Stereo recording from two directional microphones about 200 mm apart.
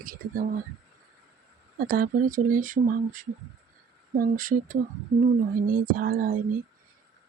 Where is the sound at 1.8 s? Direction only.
45° right (ahead or behind).